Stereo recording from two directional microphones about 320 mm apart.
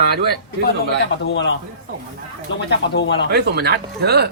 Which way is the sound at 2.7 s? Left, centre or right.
Left.